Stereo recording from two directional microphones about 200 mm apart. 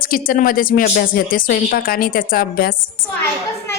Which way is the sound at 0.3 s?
45° left (ahead or behind).